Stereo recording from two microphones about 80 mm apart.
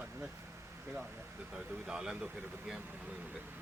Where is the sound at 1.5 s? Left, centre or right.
Centre.